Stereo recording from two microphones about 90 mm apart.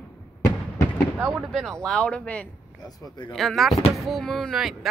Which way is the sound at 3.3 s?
Centre (ahead or behind).